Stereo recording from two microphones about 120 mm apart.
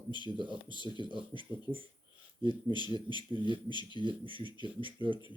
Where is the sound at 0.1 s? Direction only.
40° left (ahead or behind).